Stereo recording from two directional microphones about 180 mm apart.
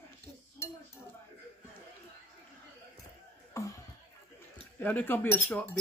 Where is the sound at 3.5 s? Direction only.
15° left (ahead or behind).